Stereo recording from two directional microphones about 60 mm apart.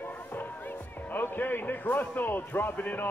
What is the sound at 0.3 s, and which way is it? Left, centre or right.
A man's voice, left.